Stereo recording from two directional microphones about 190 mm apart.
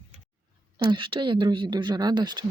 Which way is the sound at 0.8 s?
25° right (ahead or behind).